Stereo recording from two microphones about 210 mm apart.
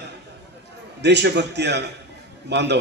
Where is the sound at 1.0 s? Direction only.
55° right (ahead or behind).